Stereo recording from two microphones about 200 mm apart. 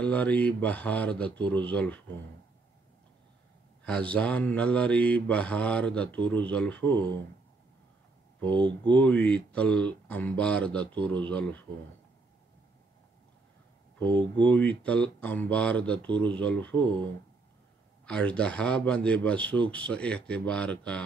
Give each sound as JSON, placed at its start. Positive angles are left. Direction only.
{"t": 0.0, "sound": "mantra", "side_deg": 5}
{"t": 3.8, "sound": "mantra", "side_deg": 5}
{"t": 8.5, "sound": "speech", "side_deg": -25}
{"t": 8.8, "sound": "mantra", "side_deg": 5}
{"t": 14.4, "sound": "mantra", "side_deg": 5}
{"t": 18.0, "sound": "a man's voice", "side_deg": 5}